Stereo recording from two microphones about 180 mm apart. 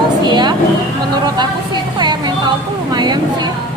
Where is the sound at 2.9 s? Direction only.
25° right (ahead or behind).